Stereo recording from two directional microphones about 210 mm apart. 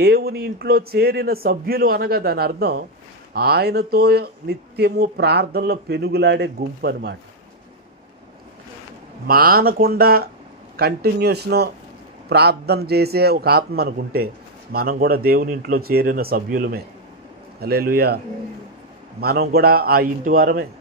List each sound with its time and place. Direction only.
0.0 s a man's voice: 50° right (ahead or behind)
9.3 s a man's voice: 45° right (ahead or behind)